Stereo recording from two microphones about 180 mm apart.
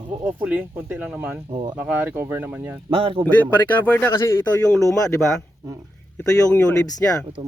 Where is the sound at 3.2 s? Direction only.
10° left (ahead or behind).